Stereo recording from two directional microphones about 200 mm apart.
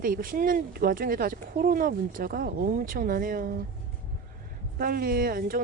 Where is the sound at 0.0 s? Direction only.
45° right (ahead or behind).